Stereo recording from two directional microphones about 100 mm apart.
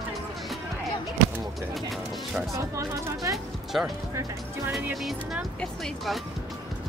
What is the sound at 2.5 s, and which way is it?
Speech, 30° right (ahead or behind).